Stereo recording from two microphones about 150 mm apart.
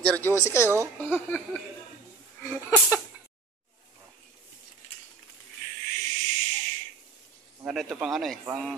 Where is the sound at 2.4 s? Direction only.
15° left (ahead or behind).